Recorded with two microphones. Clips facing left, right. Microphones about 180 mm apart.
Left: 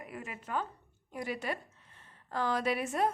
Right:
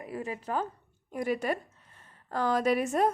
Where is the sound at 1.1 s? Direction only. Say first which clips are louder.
Right 7 dB; 50° right (ahead or behind).